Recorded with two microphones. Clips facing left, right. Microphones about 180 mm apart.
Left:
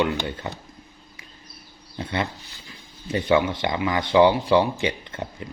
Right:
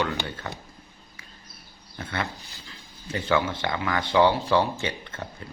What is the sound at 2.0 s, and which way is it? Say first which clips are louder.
Speech: left 4 dB; 20° left (ahead or behind).